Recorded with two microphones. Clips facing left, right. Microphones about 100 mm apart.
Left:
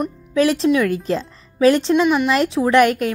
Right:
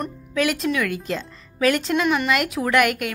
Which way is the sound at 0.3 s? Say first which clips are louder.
Left 7 dB; 30° left (ahead or behind).